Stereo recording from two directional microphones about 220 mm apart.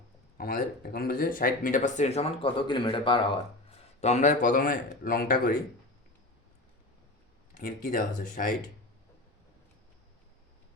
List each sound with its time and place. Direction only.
0.3 s speech: 40° left (ahead or behind); by 3.4 s 20° left (ahead or behind)
4.0 s speech: 30° left (ahead or behind)
7.5 s speech: 40° left (ahead or behind)